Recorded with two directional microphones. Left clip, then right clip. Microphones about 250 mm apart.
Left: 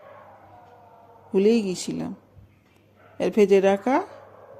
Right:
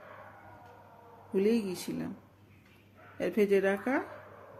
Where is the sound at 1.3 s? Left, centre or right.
Left.